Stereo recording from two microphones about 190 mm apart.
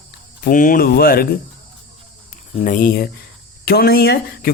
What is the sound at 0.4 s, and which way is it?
Speech, 45° left (ahead or behind).